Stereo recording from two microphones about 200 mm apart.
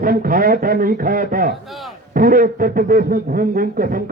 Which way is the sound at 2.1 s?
45° right (ahead or behind).